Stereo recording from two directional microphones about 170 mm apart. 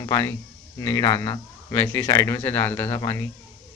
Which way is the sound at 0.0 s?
20° left (ahead or behind).